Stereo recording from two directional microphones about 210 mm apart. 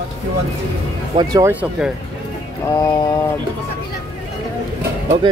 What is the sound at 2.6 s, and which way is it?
Mantra, 15° left (ahead or behind).